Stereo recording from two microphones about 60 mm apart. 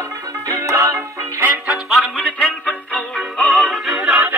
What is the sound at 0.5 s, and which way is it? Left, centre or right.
Music, right.